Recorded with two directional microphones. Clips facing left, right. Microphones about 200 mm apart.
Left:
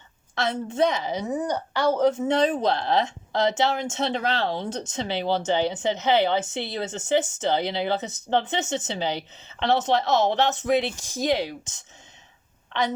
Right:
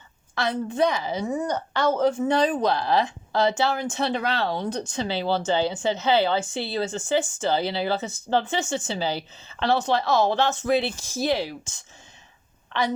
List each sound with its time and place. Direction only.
0.4 s speech: 25° left (ahead or behind)